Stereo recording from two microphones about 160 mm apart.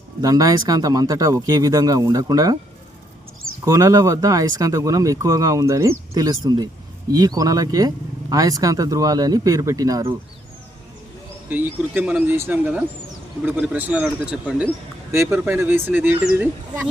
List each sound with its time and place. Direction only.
0.2 s speech: 25° right (ahead or behind)
3.7 s speech: 20° right (ahead or behind)
11.4 s speech: 10° right (ahead or behind)